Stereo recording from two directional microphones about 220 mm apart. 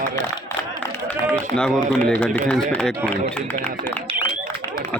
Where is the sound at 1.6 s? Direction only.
5° left (ahead or behind).